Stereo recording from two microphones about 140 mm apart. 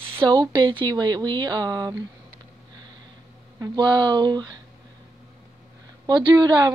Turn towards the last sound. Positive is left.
turn(degrees=-30)  # may be behind; listen again after turning